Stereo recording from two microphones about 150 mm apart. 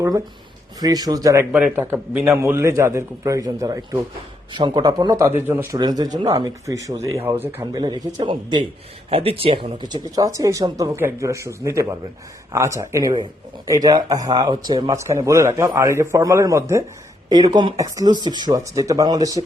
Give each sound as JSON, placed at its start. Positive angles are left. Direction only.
{"t": 0.8, "sound": "a man's voice", "side_deg": -25}
{"t": 1.5, "sound": "a man's voice", "side_deg": -10}
{"t": 5.3, "sound": "a man's voice", "side_deg": -15}
{"t": 5.7, "sound": "a man's voice", "side_deg": -25}